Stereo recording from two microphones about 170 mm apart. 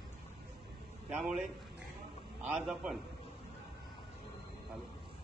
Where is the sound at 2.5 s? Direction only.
5° right (ahead or behind).